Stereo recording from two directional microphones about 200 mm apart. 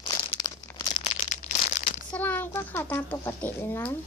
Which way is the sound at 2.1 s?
10° left (ahead or behind).